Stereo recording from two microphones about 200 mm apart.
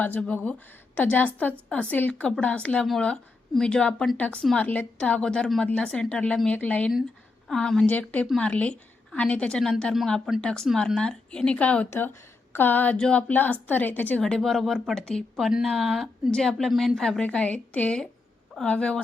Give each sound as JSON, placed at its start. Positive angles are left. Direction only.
{"t": 0.0, "sound": "a woman's voice", "side_deg": 5}